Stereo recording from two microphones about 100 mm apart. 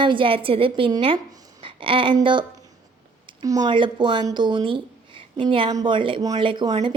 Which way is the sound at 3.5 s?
40° right (ahead or behind).